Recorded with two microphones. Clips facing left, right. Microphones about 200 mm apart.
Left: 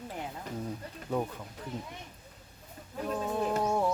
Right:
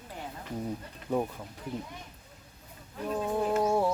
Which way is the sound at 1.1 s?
15° right (ahead or behind).